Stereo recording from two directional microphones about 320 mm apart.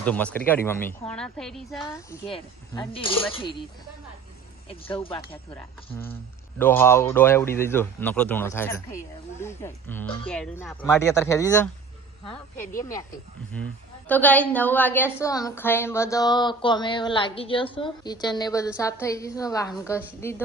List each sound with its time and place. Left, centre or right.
0.0 s a woman's voice: centre
4.9 s a woman's voice: centre
12.7 s a woman's voice: centre
14.1 s a woman's voice: centre